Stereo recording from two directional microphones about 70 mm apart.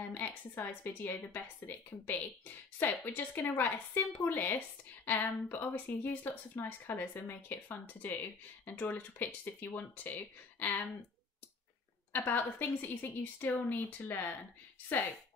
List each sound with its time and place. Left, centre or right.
0.1 s a woman's voice: left
12.1 s a woman's voice: left